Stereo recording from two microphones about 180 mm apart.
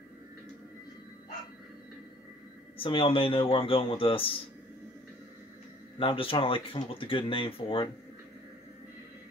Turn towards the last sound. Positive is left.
turn(degrees=30)  # may be behind; listen again after turning